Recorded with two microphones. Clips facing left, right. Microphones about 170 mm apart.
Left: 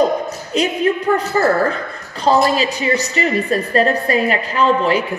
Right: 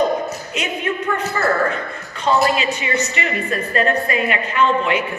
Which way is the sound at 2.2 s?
35° left (ahead or behind).